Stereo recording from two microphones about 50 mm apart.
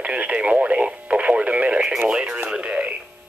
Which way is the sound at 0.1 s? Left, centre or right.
Right.